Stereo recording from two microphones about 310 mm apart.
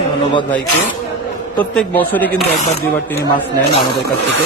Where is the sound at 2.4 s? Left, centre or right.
Left.